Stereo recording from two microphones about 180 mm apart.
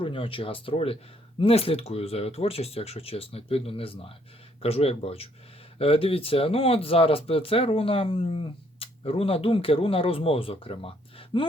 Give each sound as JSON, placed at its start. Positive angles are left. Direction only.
{"t": 0.0, "sound": "speech", "side_deg": 30}